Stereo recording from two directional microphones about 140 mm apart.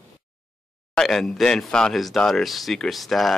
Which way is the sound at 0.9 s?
5° left (ahead or behind).